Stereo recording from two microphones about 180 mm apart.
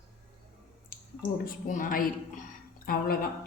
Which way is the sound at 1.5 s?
45° left (ahead or behind).